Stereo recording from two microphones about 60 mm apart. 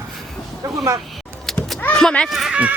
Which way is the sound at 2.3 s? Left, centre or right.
Centre.